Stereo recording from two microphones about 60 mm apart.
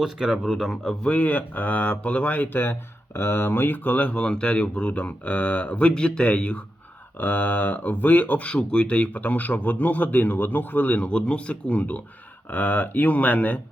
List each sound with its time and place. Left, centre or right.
0.0 s speech: centre
1.0 s speech: left